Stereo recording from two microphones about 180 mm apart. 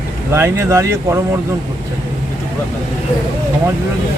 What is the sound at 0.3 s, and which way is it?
Speech, 15° right (ahead or behind).